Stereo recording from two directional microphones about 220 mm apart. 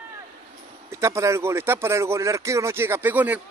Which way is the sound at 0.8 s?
10° right (ahead or behind).